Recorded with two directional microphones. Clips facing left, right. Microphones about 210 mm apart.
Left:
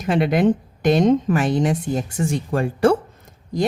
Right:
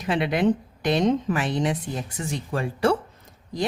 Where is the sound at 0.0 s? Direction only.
45° left (ahead or behind).